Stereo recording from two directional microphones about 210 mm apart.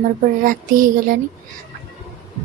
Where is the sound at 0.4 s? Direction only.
40° right (ahead or behind).